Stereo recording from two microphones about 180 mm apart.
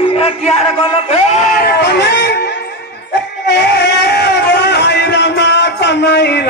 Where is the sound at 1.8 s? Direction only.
70° left (ahead or behind).